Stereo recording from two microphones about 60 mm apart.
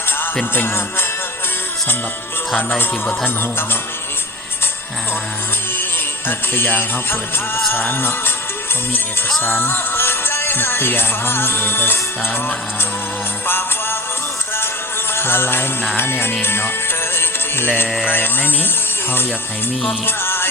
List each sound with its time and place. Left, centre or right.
0.5 s music: left
2.6 s speech: left
6.2 s music: left
9.4 s music: left
13.5 s jingle bell: left
15.1 s music: left
18.0 s music: left
20.1 s music: left